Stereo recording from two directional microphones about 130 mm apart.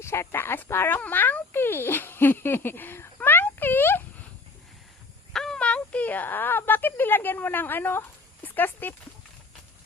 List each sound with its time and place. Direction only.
0.0 s speech: 20° left (ahead or behind)
5.3 s speech: 5° left (ahead or behind)